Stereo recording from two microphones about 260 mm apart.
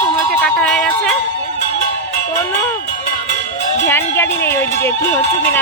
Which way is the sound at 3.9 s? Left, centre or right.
Centre.